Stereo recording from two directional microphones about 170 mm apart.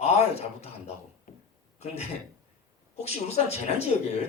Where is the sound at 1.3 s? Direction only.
50° left (ahead or behind).